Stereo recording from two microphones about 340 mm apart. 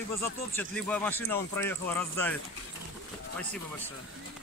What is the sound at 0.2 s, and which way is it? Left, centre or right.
Speech, centre.